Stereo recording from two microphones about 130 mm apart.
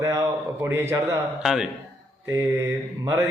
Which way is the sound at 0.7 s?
20° right (ahead or behind).